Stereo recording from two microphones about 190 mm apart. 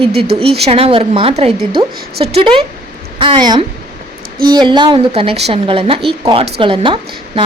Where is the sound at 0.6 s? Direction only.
30° right (ahead or behind).